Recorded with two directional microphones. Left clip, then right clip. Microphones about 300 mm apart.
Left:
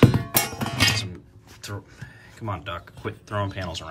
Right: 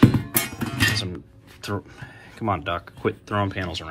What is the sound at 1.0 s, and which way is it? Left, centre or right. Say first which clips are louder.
Speech: right 4 dB; centre.